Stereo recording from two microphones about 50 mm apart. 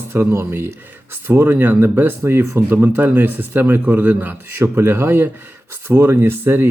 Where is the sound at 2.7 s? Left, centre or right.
Right.